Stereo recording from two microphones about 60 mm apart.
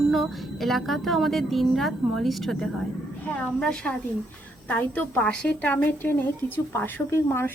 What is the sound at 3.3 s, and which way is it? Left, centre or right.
A woman's voice, centre.